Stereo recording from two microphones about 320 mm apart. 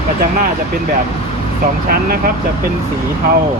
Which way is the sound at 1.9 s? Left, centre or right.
Right.